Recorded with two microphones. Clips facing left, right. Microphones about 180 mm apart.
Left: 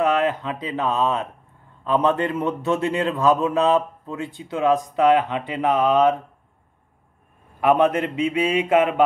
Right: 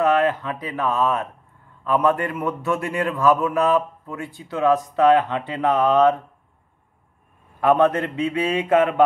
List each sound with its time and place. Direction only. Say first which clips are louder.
0.0 s a man's voice: right 1 dB; 15° left (ahead or behind)
7.6 s speech: even; 15° left (ahead or behind)